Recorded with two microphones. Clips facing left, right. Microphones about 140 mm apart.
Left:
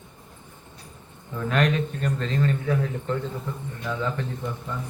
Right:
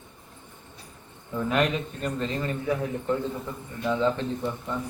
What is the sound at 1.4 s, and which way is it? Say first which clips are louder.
A man's voice: left 1 dB; 10° right (ahead or behind).